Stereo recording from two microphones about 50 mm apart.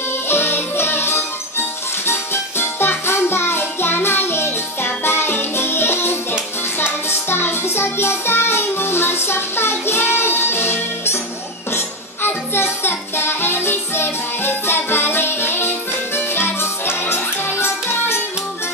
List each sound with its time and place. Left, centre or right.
0.3 s music: left